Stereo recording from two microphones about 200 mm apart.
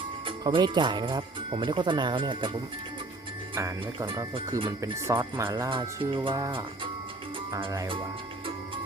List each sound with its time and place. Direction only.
0.3 s speech: 25° right (ahead or behind)